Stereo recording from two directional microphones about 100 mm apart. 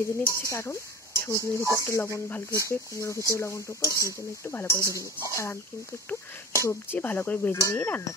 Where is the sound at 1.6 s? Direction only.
30° right (ahead or behind).